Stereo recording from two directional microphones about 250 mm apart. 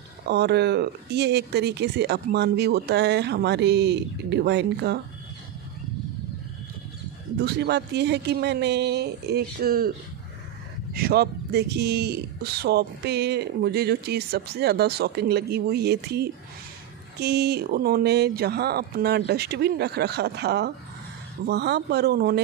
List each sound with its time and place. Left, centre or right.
0.3 s speech: right
7.3 s speech: right